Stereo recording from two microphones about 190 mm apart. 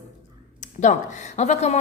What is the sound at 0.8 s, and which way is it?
A woman's voice, 40° left (ahead or behind).